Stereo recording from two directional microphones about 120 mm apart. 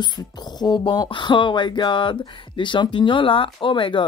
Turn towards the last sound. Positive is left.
turn(degrees=45)  # may be behind; listen again after turning